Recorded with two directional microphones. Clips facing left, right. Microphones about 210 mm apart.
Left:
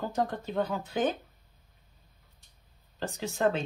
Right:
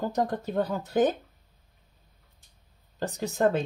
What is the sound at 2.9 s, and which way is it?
Speech, 45° right (ahead or behind).